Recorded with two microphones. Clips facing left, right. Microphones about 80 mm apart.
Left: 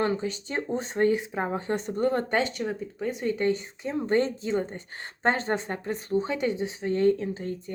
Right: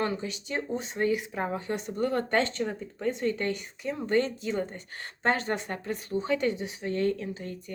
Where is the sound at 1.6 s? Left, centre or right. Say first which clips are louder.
Left 4 dB; left.